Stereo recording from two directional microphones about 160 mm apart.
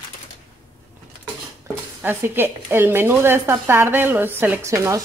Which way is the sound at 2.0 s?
10° right (ahead or behind).